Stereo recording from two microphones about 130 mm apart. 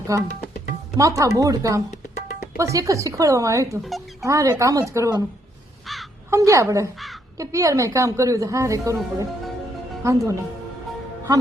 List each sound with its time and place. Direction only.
0.1 s a woman's voice: 25° right (ahead or behind)
6.3 s a woman's voice: 25° right (ahead or behind)